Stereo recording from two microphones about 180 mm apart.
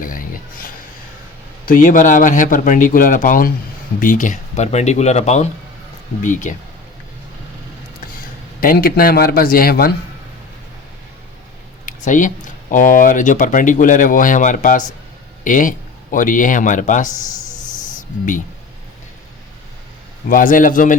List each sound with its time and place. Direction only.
0.0 s a sound: 50° left (ahead or behind)
1.6 s speech: 50° left (ahead or behind)
8.6 s a man's voice: 55° left (ahead or behind)
11.9 s a sound: 45° left (ahead or behind)
12.7 s speech: 50° left (ahead or behind)
20.3 s speech: 50° left (ahead or behind)